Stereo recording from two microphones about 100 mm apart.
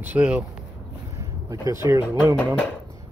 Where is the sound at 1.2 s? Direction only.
35° right (ahead or behind).